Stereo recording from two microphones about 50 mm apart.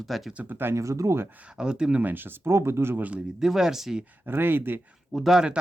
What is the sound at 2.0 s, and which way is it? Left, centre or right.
Speech, right.